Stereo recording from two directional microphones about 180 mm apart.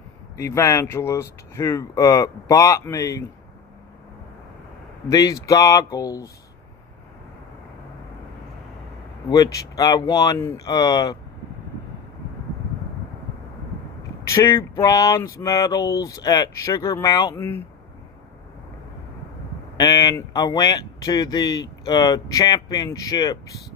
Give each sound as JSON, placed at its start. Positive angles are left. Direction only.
{"t": 0.4, "sound": "speech", "side_deg": 15}
{"t": 5.1, "sound": "speech", "side_deg": 20}
{"t": 9.3, "sound": "speech", "side_deg": 20}
{"t": 14.2, "sound": "speech", "side_deg": 15}
{"t": 19.8, "sound": "speech", "side_deg": 20}